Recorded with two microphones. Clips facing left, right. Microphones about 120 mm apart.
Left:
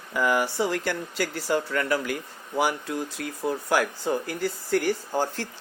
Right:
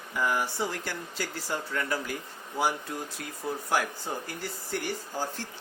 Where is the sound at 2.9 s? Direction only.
90° left.